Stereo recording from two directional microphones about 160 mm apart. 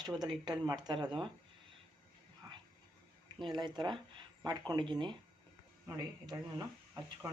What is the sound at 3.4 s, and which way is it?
Speech, 30° right (ahead or behind).